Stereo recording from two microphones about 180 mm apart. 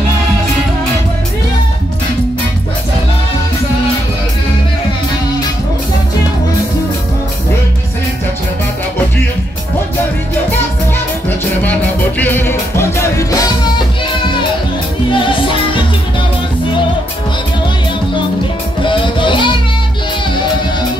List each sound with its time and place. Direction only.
12.2 s music: 10° left (ahead or behind)
15.0 s music: 30° left (ahead or behind)
18.9 s music: 25° left (ahead or behind)